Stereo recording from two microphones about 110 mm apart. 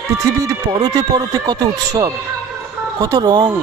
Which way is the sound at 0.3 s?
30° right (ahead or behind).